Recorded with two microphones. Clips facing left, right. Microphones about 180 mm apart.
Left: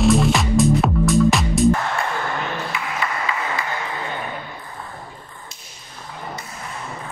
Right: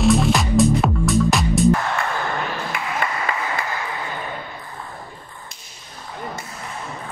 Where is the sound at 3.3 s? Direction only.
50° right (ahead or behind).